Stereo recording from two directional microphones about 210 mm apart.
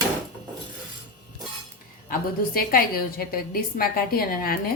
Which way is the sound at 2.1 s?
45° left (ahead or behind).